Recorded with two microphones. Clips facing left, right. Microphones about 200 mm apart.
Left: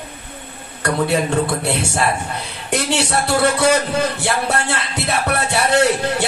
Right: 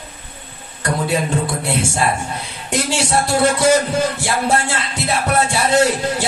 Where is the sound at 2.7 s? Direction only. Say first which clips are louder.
Even; 60° left (ahead or behind).